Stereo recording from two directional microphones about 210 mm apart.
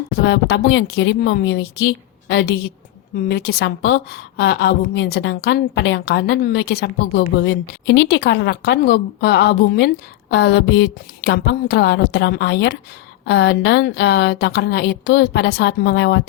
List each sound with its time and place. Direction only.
0.2 s a woman's voice: 50° left (ahead or behind)